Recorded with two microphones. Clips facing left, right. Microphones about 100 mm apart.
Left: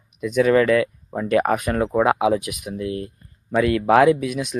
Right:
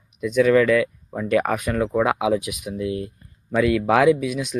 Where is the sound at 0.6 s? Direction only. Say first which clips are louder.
Even; 35° left (ahead or behind).